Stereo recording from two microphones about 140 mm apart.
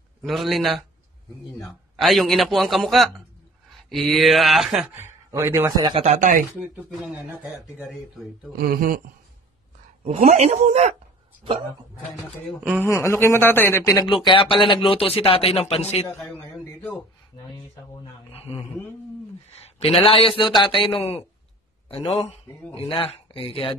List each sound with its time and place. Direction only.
0.2 s a man's voice: centre (ahead or behind)
4.9 s a man's voice: 15° right (ahead or behind)
5.8 s speech: 30° right (ahead or behind)
6.0 s speech: 65° right (ahead or behind)
7.2 s speech: 10° right (ahead or behind)
8.6 s speech: 90° right
10.0 s speech: 50° right (ahead or behind)
12.8 s a man's voice: 20° left (ahead or behind)
14.0 s speech: 35° left (ahead or behind)
16.1 s a man's voice: 15° left (ahead or behind)
18.3 s a woman's voice: 45° left (ahead or behind)
19.6 s a man's voice: 45° left (ahead or behind)
21.0 s a woman's voice: 45° left (ahead or behind)